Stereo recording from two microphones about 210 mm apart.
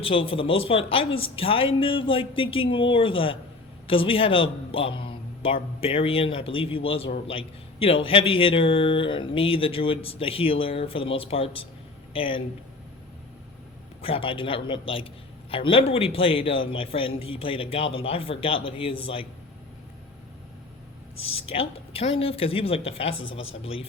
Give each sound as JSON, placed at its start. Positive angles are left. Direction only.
{"t": 0.0, "sound": "a man's voice", "side_deg": 25}
{"t": 14.0, "sound": "a man's voice", "side_deg": 25}
{"t": 21.3, "sound": "a man's voice", "side_deg": 25}